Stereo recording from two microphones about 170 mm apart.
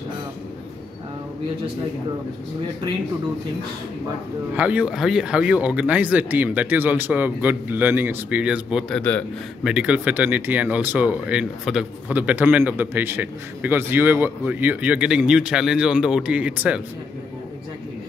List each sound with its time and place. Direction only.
4.6 s speech: 10° right (ahead or behind)
9.0 s a man's voice: 5° left (ahead or behind)
9.7 s speech: 5° right (ahead or behind)